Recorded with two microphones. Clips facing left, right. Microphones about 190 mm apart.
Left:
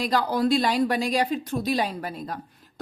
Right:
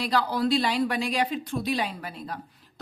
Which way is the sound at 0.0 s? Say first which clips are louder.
Left 2 dB; 45° left (ahead or behind).